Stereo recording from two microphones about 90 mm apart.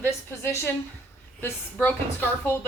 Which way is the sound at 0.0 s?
25° left (ahead or behind).